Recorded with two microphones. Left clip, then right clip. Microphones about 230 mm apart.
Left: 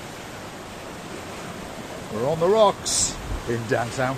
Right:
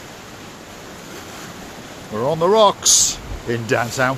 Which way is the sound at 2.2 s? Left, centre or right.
Right.